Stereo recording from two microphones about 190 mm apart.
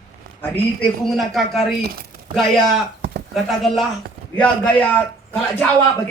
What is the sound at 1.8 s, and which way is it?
Speech, 55° right (ahead or behind).